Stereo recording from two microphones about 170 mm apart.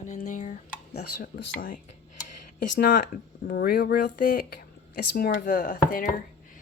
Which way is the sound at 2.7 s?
55° left (ahead or behind).